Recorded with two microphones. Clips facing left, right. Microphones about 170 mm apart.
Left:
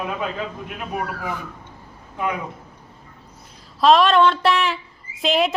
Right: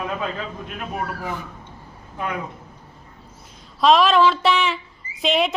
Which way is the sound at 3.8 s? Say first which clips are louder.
Left 1 dB; centre (ahead or behind).